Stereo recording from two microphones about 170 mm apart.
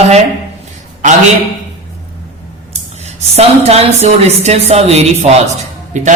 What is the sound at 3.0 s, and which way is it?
A woman's voice, 40° right (ahead or behind).